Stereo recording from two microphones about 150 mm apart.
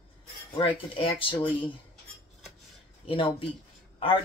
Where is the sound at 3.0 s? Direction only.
35° left (ahead or behind).